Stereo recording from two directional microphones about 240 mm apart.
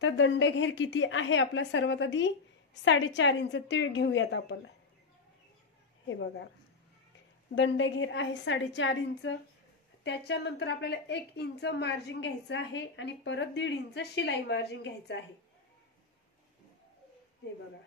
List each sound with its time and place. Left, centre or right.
0.0 s a woman's voice: left
6.0 s a woman's voice: left
7.5 s a woman's voice: left